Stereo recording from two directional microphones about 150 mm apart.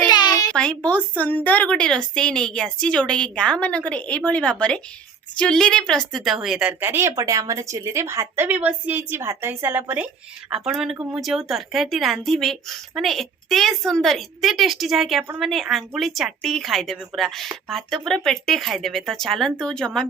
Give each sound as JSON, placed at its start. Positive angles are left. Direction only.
{"t": 0.1, "sound": "a sound", "side_deg": 25}
{"t": 0.5, "sound": "a woman's voice", "side_deg": 5}
{"t": 10.5, "sound": "speech", "side_deg": 0}